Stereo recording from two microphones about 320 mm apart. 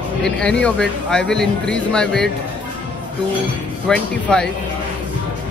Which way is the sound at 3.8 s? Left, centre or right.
Centre.